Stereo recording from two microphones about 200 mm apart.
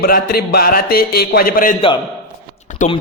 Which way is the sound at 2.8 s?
40° left (ahead or behind).